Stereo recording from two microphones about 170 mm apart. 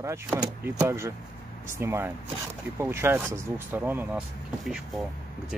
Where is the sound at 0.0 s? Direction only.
15° right (ahead or behind).